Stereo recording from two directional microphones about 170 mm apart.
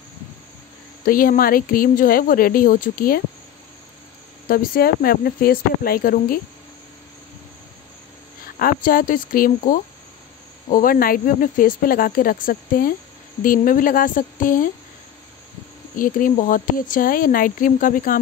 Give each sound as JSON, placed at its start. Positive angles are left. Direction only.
{"t": 1.0, "sound": "speech", "side_deg": 55}
{"t": 4.5, "sound": "speech", "side_deg": 60}
{"t": 8.5, "sound": "speech", "side_deg": 60}
{"t": 16.0, "sound": "speech", "side_deg": 55}